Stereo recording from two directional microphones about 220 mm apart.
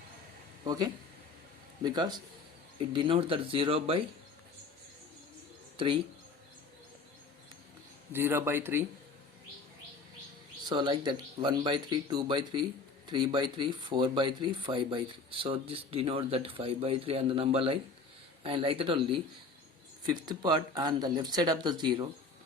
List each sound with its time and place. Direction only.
0.6 s speech: 15° right (ahead or behind)
5.7 s speech: 20° right (ahead or behind)
8.1 s speech: 10° right (ahead or behind)
10.7 s speech: 20° right (ahead or behind)